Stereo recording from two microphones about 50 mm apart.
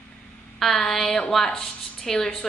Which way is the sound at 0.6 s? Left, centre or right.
Centre.